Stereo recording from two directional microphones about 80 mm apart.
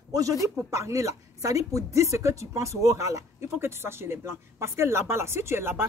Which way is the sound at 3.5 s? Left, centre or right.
Right.